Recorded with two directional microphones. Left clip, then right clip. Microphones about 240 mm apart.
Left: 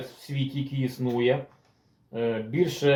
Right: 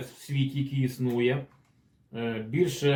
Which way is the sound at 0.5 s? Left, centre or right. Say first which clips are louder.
Left 1 dB; centre.